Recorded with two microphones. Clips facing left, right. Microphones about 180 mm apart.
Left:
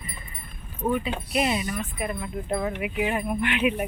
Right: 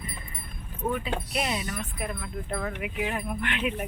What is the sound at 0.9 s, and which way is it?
Speech, 5° left (ahead or behind).